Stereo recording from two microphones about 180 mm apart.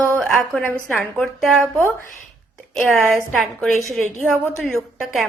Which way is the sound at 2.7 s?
Centre (ahead or behind).